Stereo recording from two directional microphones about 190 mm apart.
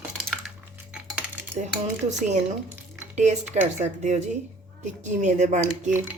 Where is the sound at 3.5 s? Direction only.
40° right (ahead or behind).